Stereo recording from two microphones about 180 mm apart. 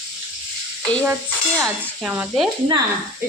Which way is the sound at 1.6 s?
10° right (ahead or behind).